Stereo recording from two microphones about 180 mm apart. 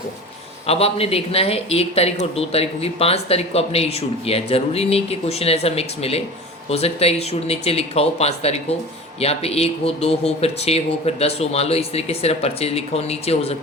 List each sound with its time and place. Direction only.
0.7 s speech: 35° left (ahead or behind)